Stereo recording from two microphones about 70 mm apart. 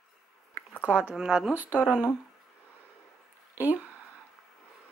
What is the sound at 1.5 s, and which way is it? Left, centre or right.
Speech, right.